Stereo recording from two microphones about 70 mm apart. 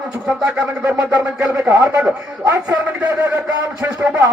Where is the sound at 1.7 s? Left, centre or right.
Right.